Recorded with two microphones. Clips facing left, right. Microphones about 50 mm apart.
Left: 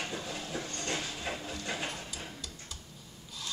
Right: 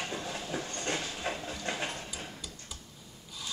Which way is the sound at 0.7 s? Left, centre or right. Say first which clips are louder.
Right 2 dB; right.